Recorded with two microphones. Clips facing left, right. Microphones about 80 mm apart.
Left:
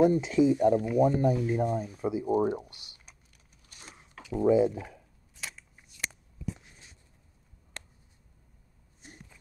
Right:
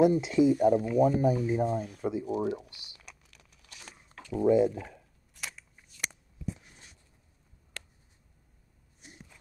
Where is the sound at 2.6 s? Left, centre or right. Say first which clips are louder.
Even; right.